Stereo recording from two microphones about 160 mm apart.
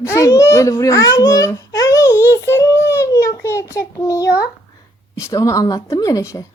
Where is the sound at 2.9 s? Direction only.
15° left (ahead or behind).